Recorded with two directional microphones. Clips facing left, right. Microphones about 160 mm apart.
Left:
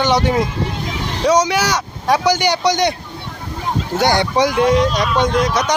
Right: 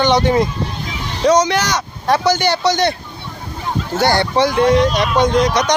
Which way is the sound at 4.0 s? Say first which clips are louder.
Right 1 dB; 15° left (ahead or behind).